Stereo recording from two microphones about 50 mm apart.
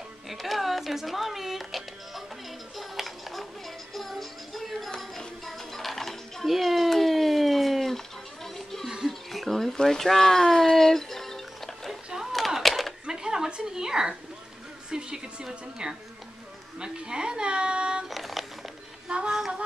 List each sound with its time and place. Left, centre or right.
0.3 s music: centre
8.8 s music: centre
9.3 s speech: centre
10.7 s music: centre
12.3 s a sound: centre
13.0 s a sound: centre
16.8 s a woman's voice: centre
18.1 s a sound: centre
19.0 s music: centre